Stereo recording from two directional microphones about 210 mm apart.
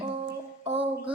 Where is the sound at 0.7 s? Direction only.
25° right (ahead or behind).